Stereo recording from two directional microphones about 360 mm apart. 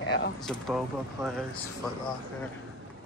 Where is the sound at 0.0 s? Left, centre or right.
Left.